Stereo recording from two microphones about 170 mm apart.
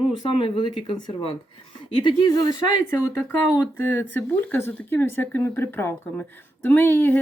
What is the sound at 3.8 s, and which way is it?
Speech, 10° left (ahead or behind).